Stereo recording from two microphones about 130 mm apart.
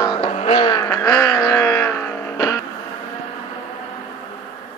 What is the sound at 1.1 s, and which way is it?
Wail, 25° left (ahead or behind).